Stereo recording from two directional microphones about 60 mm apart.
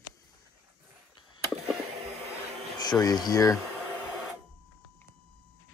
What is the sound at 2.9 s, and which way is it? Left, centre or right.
Speech, left.